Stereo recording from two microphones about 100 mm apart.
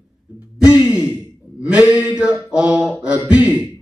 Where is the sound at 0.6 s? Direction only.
15° right (ahead or behind).